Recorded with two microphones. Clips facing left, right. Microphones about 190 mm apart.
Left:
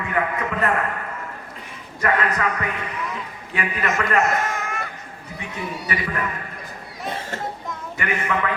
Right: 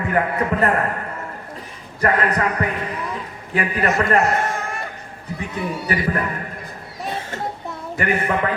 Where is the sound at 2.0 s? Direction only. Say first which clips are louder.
Right 3 dB; 35° right (ahead or behind).